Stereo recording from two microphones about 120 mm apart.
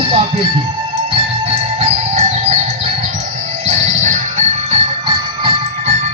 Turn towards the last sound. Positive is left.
turn(degrees=-60)  # may be behind; listen again after turning